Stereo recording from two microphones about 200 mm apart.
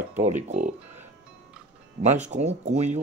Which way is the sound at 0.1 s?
35° right (ahead or behind).